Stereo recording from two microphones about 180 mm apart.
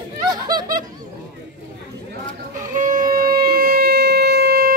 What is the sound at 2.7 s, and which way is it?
Wind instrument, 45° right (ahead or behind).